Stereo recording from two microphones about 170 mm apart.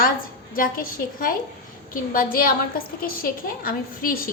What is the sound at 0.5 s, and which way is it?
A woman's voice, 55° left (ahead or behind).